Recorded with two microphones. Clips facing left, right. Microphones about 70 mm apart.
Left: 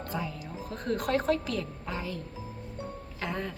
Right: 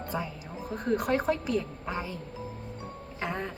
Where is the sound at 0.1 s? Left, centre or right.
Right.